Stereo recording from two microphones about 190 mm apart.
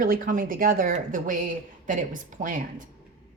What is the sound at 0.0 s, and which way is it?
Speech, 45° right (ahead or behind).